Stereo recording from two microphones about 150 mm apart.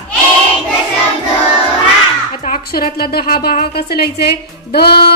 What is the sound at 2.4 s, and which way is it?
A woman's voice, 70° left (ahead or behind).